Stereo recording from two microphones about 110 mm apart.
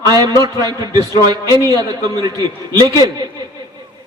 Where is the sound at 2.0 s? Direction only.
30° right (ahead or behind).